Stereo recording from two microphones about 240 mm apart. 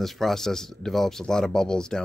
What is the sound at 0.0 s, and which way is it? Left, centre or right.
Speech, centre.